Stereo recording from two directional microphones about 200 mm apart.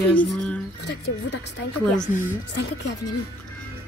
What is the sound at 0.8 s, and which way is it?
Speech, 60° left (ahead or behind).